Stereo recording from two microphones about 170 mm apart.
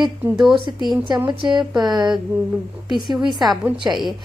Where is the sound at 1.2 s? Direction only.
25° right (ahead or behind).